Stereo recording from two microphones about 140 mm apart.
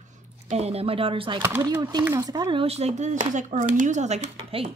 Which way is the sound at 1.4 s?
15° right (ahead or behind).